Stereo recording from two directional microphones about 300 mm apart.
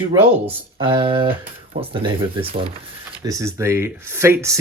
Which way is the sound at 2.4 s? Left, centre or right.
Centre.